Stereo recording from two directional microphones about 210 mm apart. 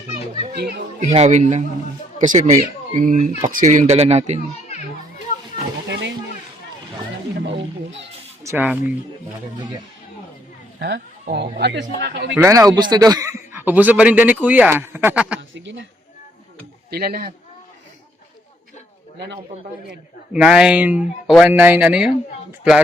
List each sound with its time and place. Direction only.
0.9 s speech: 30° right (ahead or behind)
5.9 s a sound: 60° right (ahead or behind)
7.4 s a sound: 60° right (ahead or behind)
8.4 s a man's voice: 10° right (ahead or behind)
10.8 s a woman's voice: 50° right (ahead or behind)
12.3 s a man's voice: 15° right (ahead or behind)
15.4 s speech: 60° right (ahead or behind)
16.9 s speech: 45° right (ahead or behind)
20.3 s speech: 5° right (ahead or behind)